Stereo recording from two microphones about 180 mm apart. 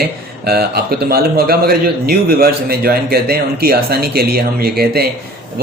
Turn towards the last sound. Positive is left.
turn(degrees=-60)  # may be behind; listen again after turning